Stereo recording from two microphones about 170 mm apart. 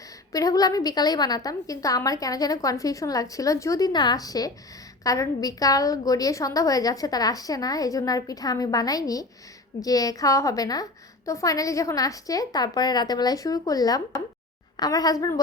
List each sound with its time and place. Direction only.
0.3 s a woman's voice: 20° left (ahead or behind)